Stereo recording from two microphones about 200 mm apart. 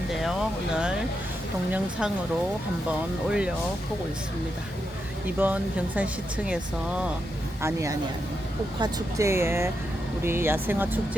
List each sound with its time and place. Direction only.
0.1 s speech: centre (ahead or behind)
1.7 s speech: 5° right (ahead or behind)
3.2 s speech: 5° right (ahead or behind)
5.4 s speech: 10° right (ahead or behind)
7.6 s speech: 15° right (ahead or behind)